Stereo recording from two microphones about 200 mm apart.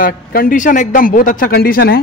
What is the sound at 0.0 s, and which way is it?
A man's voice, 45° left (ahead or behind).